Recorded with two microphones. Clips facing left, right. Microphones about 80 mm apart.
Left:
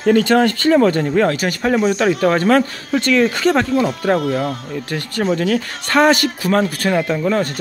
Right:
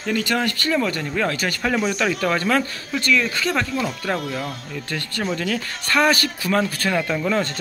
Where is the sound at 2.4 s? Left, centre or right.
Left.